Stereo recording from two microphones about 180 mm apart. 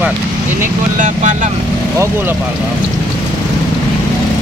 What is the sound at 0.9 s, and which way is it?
Speech, 45° right (ahead or behind).